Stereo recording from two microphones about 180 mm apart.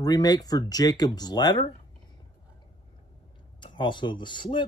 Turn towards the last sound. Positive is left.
turn(degrees=25)  # may be behind; listen again after turning